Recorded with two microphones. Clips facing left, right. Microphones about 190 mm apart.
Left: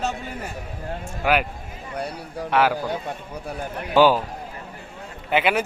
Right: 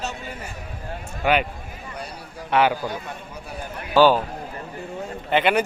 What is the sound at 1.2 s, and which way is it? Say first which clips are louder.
Speech: right 1 dB; 5° left (ahead or behind).